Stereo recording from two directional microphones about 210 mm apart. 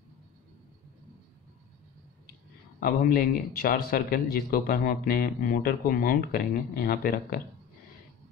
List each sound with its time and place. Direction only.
2.8 s speech: 45° left (ahead or behind)